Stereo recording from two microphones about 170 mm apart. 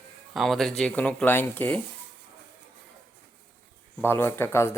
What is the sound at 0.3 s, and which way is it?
Speech, centre (ahead or behind).